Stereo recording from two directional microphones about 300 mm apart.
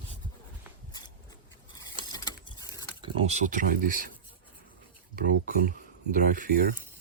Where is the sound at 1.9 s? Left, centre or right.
Centre.